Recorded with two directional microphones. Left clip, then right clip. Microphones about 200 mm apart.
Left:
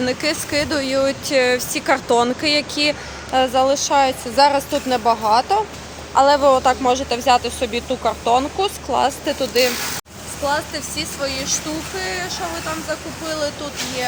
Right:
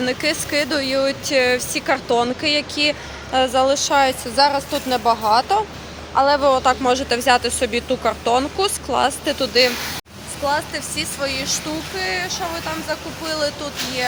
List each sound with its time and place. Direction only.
0.0 s speech: 5° left (ahead or behind)
4.4 s speech: 15° left (ahead or behind); by 13.7 s 10° right (ahead or behind)